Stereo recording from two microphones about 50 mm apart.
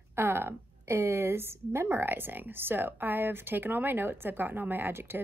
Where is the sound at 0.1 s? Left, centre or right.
Right.